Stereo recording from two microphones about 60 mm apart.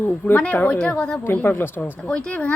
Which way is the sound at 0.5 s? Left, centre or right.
Left.